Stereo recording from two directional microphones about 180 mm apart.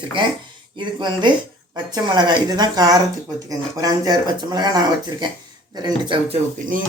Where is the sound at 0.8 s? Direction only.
25° right (ahead or behind).